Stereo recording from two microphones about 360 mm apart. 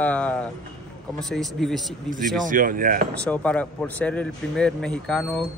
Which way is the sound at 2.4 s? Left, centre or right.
Right.